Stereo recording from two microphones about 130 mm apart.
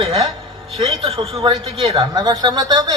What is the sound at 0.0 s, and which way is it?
A woman's voice, 40° right (ahead or behind).